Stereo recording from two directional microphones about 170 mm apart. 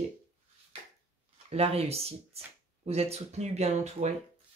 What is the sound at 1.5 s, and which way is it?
Speech, 35° right (ahead or behind).